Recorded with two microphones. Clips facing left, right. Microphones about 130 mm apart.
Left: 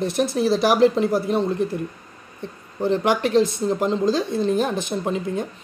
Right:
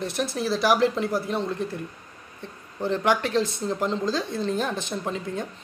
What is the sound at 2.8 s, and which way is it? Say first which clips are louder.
Speech: left 4 dB; 15° left (ahead or behind).